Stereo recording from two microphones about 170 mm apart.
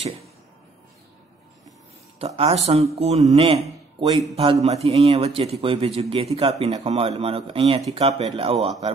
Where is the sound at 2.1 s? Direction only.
35° right (ahead or behind).